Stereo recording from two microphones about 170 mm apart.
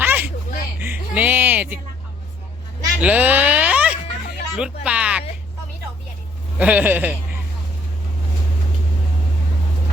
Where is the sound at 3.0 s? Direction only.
10° right (ahead or behind).